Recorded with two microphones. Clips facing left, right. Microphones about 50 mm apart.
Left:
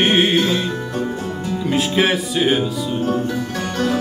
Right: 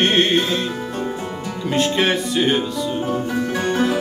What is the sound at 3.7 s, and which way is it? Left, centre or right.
Music, centre.